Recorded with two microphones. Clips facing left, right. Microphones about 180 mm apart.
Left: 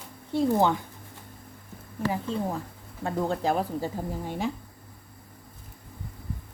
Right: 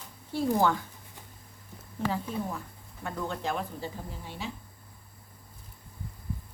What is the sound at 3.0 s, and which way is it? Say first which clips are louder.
Speech: left 7 dB; 35° left (ahead or behind).